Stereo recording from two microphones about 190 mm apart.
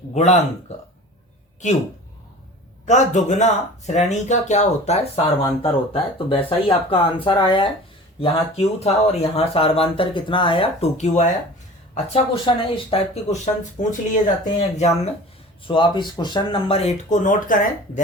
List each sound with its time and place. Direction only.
0.1 s speech: 35° left (ahead or behind)
2.8 s speech: 40° left (ahead or behind)